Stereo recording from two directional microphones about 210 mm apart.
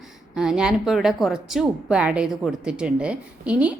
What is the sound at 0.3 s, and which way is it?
A woman's voice, 5° right (ahead or behind).